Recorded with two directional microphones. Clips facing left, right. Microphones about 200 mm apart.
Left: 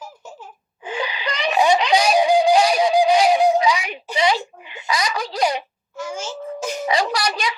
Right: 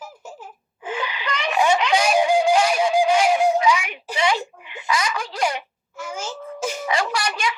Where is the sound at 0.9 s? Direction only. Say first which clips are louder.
Left 1 dB; 35° left (ahead or behind).